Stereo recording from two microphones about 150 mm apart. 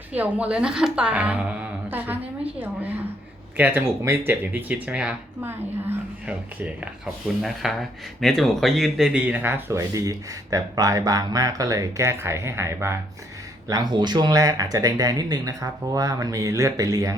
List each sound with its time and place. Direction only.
0.1 s a woman's voice: 10° right (ahead or behind)